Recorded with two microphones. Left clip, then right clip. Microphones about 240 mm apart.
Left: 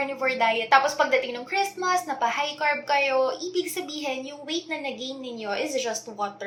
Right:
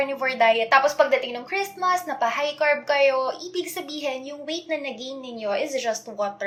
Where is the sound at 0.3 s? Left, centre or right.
Right.